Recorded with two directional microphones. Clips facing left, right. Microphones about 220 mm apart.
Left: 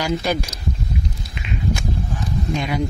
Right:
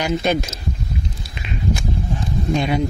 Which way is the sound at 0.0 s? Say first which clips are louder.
Right 2 dB; 20° right (ahead or behind).